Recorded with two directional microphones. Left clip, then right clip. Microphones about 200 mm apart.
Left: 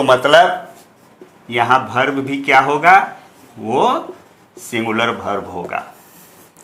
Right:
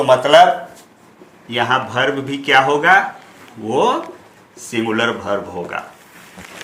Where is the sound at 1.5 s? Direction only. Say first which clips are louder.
Left 3 dB; 30° left (ahead or behind).